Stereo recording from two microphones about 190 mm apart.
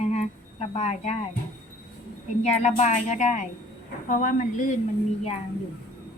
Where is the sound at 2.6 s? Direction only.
35° left (ahead or behind).